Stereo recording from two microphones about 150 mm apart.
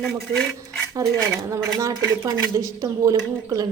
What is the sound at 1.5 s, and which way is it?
A woman's voice, 20° right (ahead or behind).